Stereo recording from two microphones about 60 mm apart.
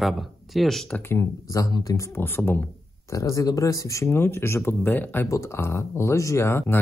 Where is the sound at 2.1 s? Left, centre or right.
Left.